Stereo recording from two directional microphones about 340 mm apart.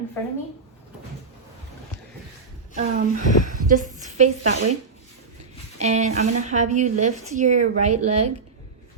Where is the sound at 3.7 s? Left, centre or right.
Right.